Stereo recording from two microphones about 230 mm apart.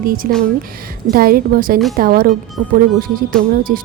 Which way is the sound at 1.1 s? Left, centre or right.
Right.